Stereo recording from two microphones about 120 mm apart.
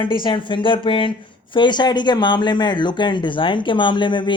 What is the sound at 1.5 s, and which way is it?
Speech, 40° left (ahead or behind).